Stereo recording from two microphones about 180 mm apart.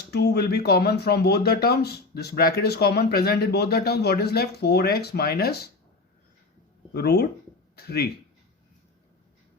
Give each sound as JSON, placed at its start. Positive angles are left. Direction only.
{"t": 0.1, "sound": "speech", "side_deg": 65}
{"t": 6.9, "sound": "speech", "side_deg": 65}